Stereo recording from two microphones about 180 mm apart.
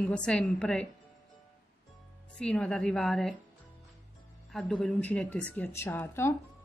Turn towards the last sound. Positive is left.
turn(degrees=10)  # may be behind; listen again after turning